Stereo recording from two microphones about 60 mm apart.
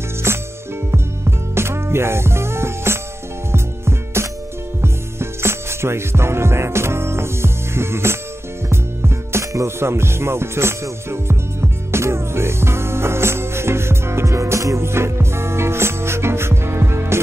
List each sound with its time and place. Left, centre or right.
0.9 s music: right